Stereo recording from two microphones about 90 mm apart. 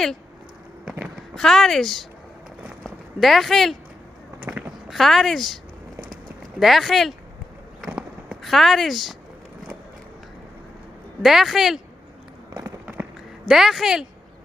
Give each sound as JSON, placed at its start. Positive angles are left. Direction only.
{"t": 0.8, "sound": "run", "side_deg": -10}
{"t": 1.3, "sound": "speech", "side_deg": 5}
{"t": 2.6, "sound": "a sound", "side_deg": 0}
{"t": 4.4, "sound": "a sound", "side_deg": -15}
{"t": 4.8, "sound": "speech", "side_deg": 0}
{"t": 6.6, "sound": "speech", "side_deg": 0}
{"t": 7.8, "sound": "a sound", "side_deg": -10}
{"t": 8.4, "sound": "speech", "side_deg": 0}
{"t": 11.2, "sound": "speech", "side_deg": -5}
{"t": 13.5, "sound": "speech", "side_deg": -5}